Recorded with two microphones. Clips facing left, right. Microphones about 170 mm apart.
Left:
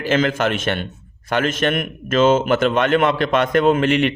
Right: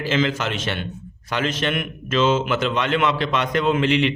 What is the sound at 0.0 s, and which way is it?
A man's voice, 50° left (ahead or behind).